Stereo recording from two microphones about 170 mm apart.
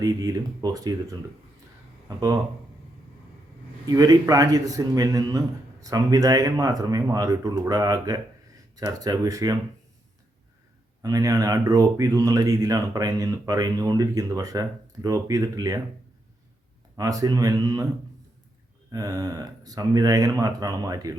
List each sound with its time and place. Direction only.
0.0 s speech: 20° right (ahead or behind)
2.0 s speech: 20° right (ahead or behind)
3.8 s speech: 20° right (ahead or behind)
11.0 s speech: 20° right (ahead or behind)
17.0 s speech: 20° right (ahead or behind)
18.9 s speech: 20° right (ahead or behind)